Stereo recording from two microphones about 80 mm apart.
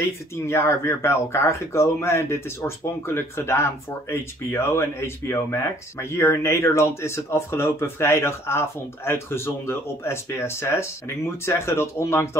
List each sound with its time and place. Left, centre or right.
0.5 s speech: left